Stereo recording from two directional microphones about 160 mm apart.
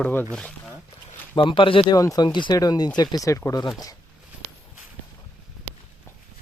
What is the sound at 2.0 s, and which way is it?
Speech, 25° left (ahead or behind).